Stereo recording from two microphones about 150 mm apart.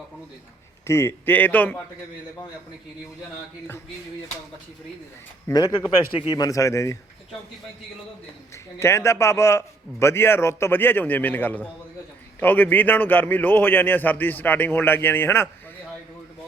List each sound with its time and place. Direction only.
0.9 s a man's voice: 15° left (ahead or behind)
5.5 s speech: 25° left (ahead or behind)
8.8 s a man's voice: 15° left (ahead or behind)